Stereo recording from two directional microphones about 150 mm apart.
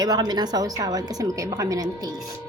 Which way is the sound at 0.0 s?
25° right (ahead or behind).